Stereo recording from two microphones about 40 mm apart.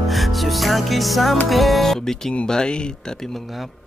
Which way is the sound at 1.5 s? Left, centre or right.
Centre.